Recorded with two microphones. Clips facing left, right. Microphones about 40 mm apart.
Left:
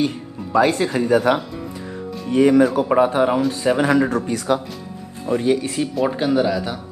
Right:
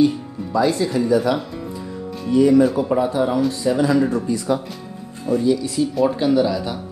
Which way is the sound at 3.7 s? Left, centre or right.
Left.